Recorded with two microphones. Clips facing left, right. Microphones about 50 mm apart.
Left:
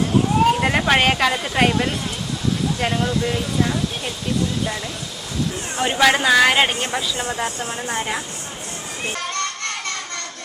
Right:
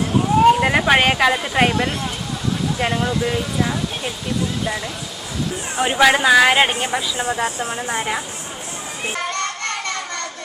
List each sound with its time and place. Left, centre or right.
0.5 s speech: centre
5.7 s speech: centre
9.1 s music: centre